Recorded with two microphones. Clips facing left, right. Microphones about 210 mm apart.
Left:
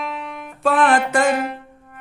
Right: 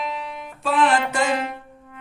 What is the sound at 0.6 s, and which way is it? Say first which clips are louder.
Music: left 3 dB; 55° left (ahead or behind).